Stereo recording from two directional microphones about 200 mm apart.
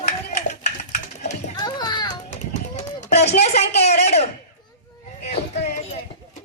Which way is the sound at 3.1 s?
35° left (ahead or behind).